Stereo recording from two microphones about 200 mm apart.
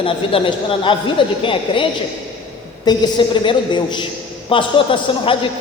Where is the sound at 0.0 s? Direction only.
25° left (ahead or behind).